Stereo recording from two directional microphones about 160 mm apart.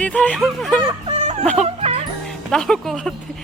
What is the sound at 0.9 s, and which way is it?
Whimper, 45° right (ahead or behind).